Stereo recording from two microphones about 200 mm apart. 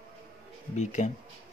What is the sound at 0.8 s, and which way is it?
Speech, 35° left (ahead or behind).